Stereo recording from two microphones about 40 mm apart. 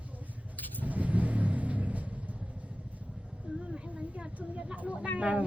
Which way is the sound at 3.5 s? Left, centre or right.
Right.